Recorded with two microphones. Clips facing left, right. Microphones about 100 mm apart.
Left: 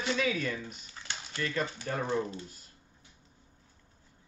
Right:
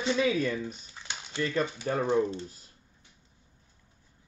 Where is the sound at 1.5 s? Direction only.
30° right (ahead or behind).